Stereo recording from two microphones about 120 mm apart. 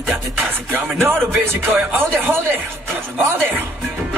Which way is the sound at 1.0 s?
15° right (ahead or behind).